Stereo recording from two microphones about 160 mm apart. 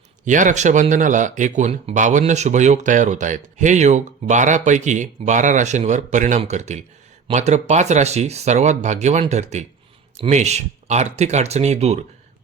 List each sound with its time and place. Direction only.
0.3 s speech: 50° right (ahead or behind)